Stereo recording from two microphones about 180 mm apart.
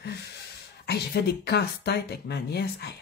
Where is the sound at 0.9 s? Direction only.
65° left (ahead or behind).